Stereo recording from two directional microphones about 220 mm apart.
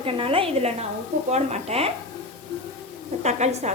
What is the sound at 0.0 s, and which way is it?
A woman's voice, 25° right (ahead or behind).